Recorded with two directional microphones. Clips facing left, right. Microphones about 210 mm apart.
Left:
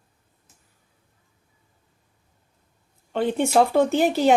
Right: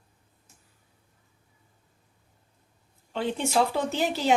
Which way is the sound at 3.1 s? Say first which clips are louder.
Left 6 dB; 55° left (ahead or behind).